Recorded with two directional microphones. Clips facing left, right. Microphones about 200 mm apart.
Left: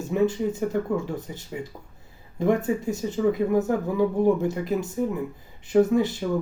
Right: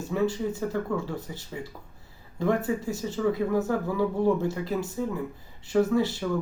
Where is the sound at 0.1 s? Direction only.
20° left (ahead or behind).